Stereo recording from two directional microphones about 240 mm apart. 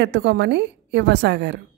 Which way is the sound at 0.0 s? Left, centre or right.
Right.